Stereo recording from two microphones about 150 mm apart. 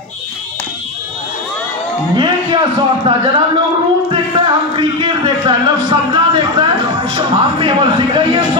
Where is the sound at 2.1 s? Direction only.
30° right (ahead or behind).